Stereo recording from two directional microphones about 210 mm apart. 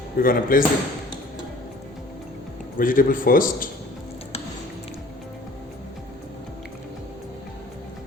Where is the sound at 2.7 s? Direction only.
40° left (ahead or behind).